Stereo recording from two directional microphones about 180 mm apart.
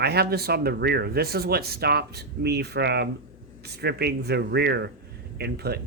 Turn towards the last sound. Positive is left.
turn(degrees=-65)  # may be behind; listen again after turning